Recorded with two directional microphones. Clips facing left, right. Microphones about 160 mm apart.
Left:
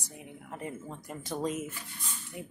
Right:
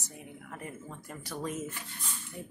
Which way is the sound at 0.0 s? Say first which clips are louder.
Even; 20° left (ahead or behind).